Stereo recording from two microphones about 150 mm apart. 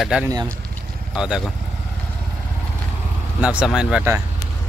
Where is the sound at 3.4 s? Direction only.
5° right (ahead or behind).